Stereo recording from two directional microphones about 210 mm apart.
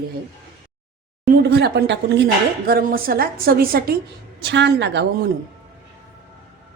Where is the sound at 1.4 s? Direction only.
50° right (ahead or behind).